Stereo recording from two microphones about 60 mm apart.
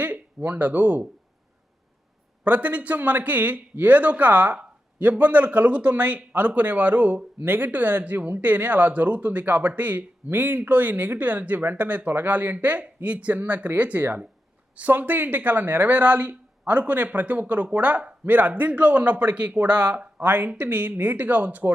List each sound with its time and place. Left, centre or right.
0.0 s speech: right
2.4 s speech: right